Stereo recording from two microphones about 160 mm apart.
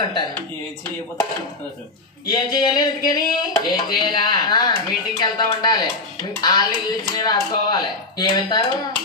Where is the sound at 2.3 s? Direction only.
25° left (ahead or behind).